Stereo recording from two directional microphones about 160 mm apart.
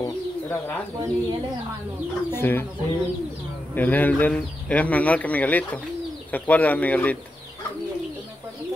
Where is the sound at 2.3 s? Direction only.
15° left (ahead or behind).